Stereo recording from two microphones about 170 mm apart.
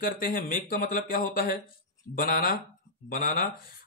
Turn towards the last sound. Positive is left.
turn(degrees=55)  # may be behind; listen again after turning